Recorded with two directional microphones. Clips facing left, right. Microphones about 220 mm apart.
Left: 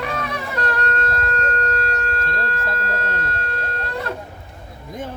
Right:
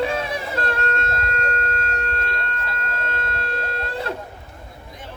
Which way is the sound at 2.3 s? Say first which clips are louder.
Left 4 dB; 50° left (ahead or behind).